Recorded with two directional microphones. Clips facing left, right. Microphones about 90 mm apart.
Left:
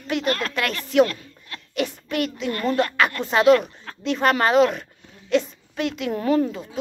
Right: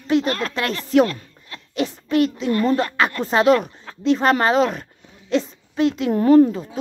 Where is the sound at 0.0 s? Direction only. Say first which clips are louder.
Right 4 dB; 30° right (ahead or behind).